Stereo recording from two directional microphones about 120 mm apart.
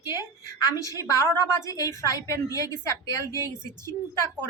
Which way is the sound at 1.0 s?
25° left (ahead or behind).